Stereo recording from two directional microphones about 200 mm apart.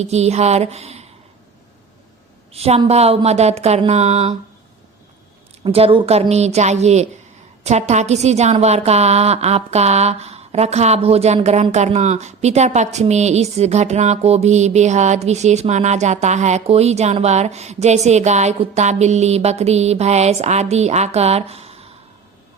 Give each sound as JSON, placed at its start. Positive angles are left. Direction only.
{"t": 0.0, "sound": "a woman's voice", "side_deg": -35}
{"t": 2.5, "sound": "a woman's voice", "side_deg": -30}
{"t": 5.6, "sound": "a woman's voice", "side_deg": -30}